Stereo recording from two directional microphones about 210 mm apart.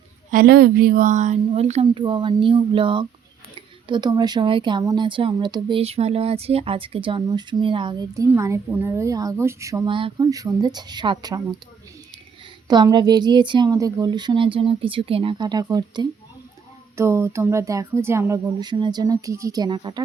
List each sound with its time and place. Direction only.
0.3 s speech: 45° right (ahead or behind); by 11.4 s 20° right (ahead or behind)
12.6 s speech: 20° right (ahead or behind)